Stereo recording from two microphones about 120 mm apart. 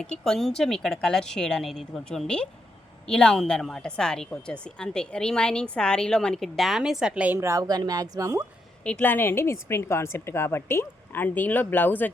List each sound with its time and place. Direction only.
0.0 s a woman's voice: 5° left (ahead or behind); by 7.3 s 10° right (ahead or behind)
7.3 s speech: 25° right (ahead or behind)
8.8 s a woman's voice: 10° left (ahead or behind)